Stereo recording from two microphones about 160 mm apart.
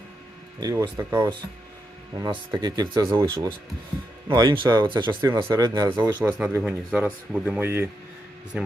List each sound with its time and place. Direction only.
0.6 s speech: 20° right (ahead or behind)
2.1 s speech: 25° right (ahead or behind)
5.2 s speech: 20° right (ahead or behind)
6.2 s speech: 10° right (ahead or behind)